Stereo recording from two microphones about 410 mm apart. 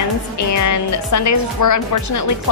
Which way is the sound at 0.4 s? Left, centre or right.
Left.